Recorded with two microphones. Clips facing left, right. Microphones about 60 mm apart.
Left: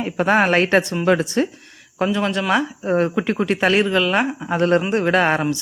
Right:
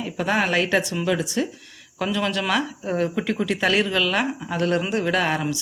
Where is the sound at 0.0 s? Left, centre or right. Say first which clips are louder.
Left 6 dB; left.